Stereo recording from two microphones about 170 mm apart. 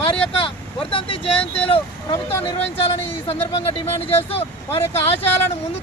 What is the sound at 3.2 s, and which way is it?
Speech, 35° left (ahead or behind).